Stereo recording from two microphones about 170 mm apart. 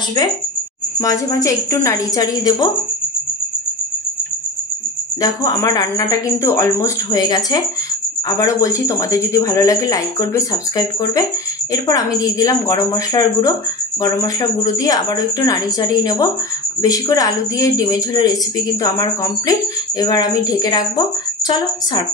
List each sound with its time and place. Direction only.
1.0 s a woman's voice: 20° left (ahead or behind)
5.2 s a woman's voice: 20° left (ahead or behind)